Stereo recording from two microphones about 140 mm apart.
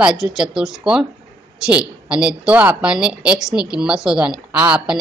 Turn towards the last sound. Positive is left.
turn(degrees=-5)  # may be behind; listen again after turning